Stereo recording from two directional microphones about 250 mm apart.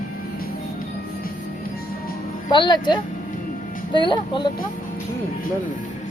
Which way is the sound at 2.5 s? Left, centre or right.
Centre.